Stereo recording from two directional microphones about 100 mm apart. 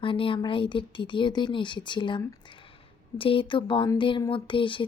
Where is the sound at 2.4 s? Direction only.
60° left (ahead or behind).